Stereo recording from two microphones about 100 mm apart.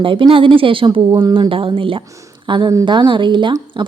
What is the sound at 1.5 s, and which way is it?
Speech, 60° right (ahead or behind).